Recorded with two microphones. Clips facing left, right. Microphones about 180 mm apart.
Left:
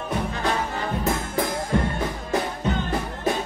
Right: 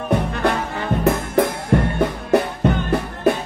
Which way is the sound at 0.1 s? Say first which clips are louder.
Right 6 dB; 60° right (ahead or behind).